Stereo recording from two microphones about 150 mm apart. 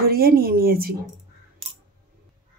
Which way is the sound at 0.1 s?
90° right.